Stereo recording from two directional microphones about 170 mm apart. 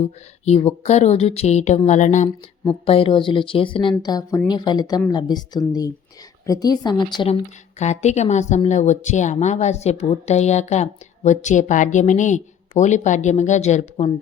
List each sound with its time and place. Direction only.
0.0 s a woman's voice: 40° left (ahead or behind)
2.8 s speech: 35° left (ahead or behind)
7.8 s a woman's voice: 40° left (ahead or behind)